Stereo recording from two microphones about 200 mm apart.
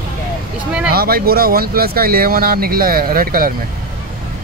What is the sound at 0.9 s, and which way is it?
Speech, 50° right (ahead or behind).